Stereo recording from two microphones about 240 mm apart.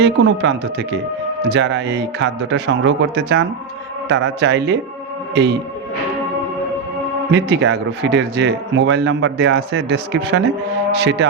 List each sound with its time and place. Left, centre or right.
0.0 s speech: right
7.3 s speech: right